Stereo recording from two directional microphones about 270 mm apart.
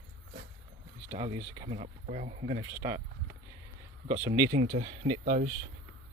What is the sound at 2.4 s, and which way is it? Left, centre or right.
Speech, centre.